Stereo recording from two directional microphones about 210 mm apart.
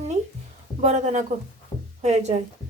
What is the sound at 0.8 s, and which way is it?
Speech, 30° right (ahead or behind).